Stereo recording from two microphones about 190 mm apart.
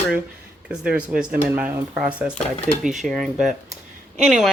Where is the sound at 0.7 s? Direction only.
5° right (ahead or behind).